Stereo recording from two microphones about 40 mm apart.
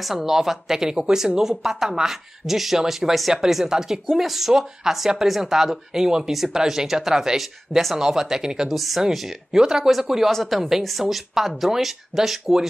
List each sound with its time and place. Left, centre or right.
0.0 s speech: centre
8.6 s speech: centre
9.6 s speech: centre
9.8 s speech: centre
10.3 s speech: centre